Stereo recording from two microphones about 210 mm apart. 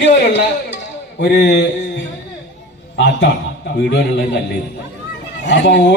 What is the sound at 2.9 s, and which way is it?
A man's voice, 55° left (ahead or behind).